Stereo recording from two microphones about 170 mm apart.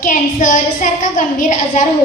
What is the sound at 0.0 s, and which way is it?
A woman's voice, 50° left (ahead or behind).